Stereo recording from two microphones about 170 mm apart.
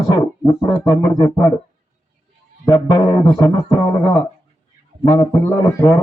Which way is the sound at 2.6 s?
25° left (ahead or behind).